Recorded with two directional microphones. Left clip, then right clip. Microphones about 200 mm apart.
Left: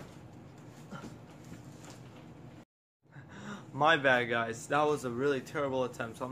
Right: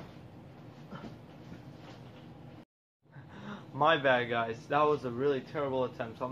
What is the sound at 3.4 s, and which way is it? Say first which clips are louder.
Speech: even; 25° left (ahead or behind).